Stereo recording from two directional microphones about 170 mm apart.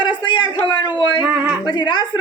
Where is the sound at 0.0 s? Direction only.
25° left (ahead or behind).